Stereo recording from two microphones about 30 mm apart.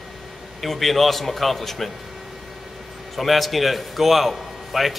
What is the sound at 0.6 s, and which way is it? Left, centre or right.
A man's voice, centre.